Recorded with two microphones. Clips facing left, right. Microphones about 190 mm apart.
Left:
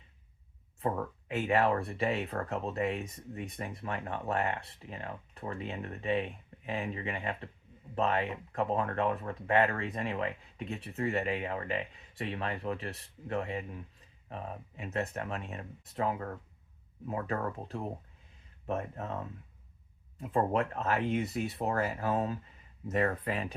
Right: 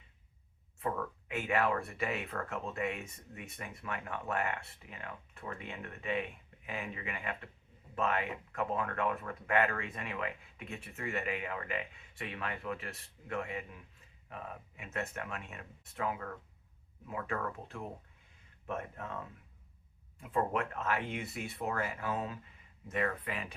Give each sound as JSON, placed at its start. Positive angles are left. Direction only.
{"t": 0.8, "sound": "speech", "side_deg": 30}
{"t": 20.3, "sound": "speech", "side_deg": 35}